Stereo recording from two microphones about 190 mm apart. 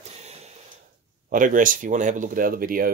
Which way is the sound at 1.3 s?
45° right (ahead or behind).